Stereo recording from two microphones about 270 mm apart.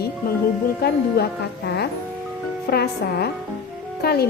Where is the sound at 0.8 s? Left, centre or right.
Left.